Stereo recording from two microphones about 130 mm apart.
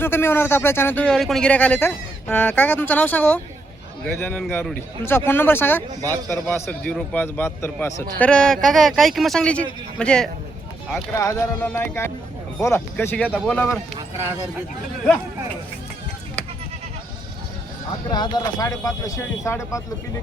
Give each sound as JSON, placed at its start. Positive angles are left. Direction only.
{"t": 0.0, "sound": "speech", "side_deg": 15}
{"t": 1.0, "sound": "speech", "side_deg": 5}
{"t": 8.2, "sound": "a man's voice", "side_deg": 5}
{"t": 11.1, "sound": "speech", "side_deg": 25}
{"t": 18.1, "sound": "speech", "side_deg": 30}